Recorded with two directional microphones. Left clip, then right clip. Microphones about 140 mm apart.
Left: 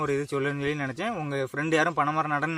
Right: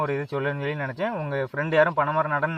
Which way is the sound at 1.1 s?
45° left (ahead or behind).